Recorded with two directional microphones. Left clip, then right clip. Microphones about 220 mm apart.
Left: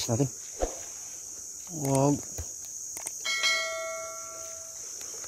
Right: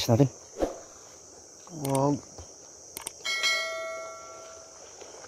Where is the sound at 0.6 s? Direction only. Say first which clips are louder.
Right 3 dB; centre (ahead or behind).